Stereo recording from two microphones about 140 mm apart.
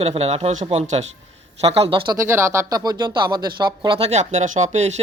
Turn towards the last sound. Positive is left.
turn(degrees=-55)  # may be behind; listen again after turning